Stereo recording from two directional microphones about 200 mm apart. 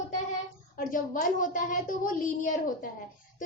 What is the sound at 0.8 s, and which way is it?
A woman's voice, 40° left (ahead or behind).